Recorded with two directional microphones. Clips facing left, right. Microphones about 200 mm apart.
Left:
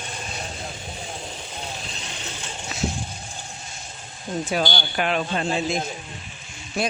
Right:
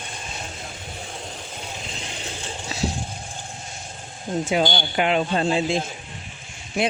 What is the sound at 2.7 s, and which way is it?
Vehicle, 30° right (ahead or behind).